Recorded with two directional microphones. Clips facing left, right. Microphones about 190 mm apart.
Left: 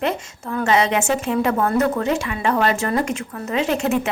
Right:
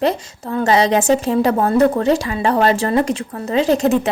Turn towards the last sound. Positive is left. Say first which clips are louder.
# right 5 dB
turn(degrees=-35)  # may be behind; listen again after turning